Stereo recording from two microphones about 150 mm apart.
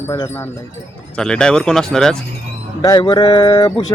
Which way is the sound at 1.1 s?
5° left (ahead or behind).